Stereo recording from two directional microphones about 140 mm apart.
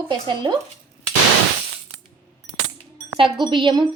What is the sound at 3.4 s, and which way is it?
Speech, 35° right (ahead or behind).